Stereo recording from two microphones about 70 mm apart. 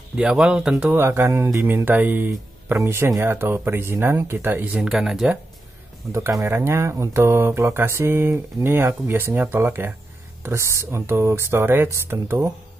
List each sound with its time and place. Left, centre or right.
0.1 s speech: centre
0.8 s speech: right
1.9 s speech: right
2.8 s speech: right
4.7 s speech: centre
6.1 s speech: right
10.4 s speech: right